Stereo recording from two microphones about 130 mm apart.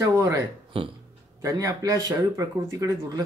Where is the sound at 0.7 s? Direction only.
40° right (ahead or behind).